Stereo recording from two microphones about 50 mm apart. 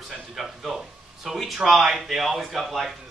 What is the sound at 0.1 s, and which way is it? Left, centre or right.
A man's voice, centre.